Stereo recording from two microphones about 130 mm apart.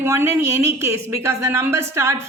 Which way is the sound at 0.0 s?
20° right (ahead or behind).